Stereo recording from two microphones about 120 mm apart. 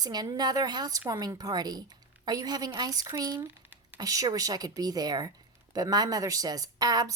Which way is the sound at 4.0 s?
30° right (ahead or behind).